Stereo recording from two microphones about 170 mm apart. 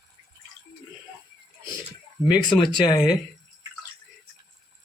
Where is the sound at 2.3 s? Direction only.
25° left (ahead or behind).